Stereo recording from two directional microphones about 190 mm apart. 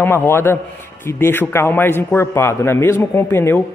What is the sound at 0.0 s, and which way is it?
A man's voice, 10° left (ahead or behind).